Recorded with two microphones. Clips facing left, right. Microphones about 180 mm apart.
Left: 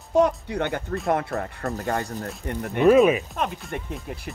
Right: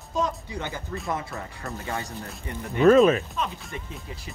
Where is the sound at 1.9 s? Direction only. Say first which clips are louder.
Left 4 dB; 50° left (ahead or behind).